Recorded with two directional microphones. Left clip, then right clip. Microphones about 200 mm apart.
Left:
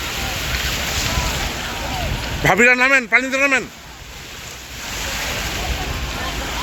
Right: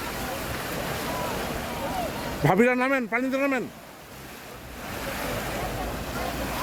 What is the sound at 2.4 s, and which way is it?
Speech, 10° right (ahead or behind).